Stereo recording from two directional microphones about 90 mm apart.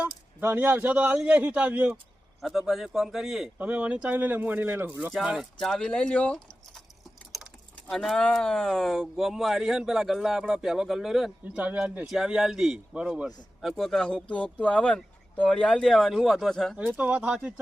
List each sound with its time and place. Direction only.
0.3 s speech: 20° right (ahead or behind)
2.4 s speech: centre (ahead or behind)
3.6 s speech: 15° right (ahead or behind)
5.2 s speech: 10° right (ahead or behind)
5.5 s speech: 5° left (ahead or behind)
7.3 s speech: centre (ahead or behind)
11.5 s speech: 15° right (ahead or behind)
12.0 s speech: 5° right (ahead or behind)
16.7 s speech: 15° right (ahead or behind)